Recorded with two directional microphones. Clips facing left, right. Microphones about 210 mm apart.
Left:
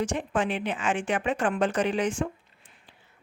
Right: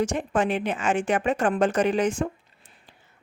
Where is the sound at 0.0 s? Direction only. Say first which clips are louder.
Right 3 dB; 40° right (ahead or behind).